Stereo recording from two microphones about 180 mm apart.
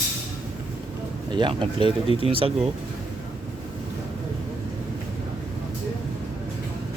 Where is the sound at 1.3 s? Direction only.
25° right (ahead or behind).